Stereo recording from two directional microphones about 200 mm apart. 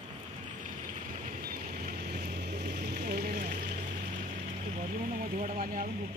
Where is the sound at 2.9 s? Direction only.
50° right (ahead or behind).